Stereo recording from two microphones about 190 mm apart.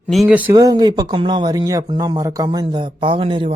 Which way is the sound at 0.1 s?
5° right (ahead or behind).